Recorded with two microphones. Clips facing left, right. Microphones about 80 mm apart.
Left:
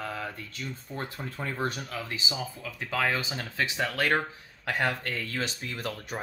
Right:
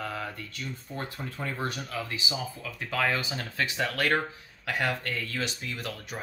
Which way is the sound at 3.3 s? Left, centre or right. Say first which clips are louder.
Even; centre.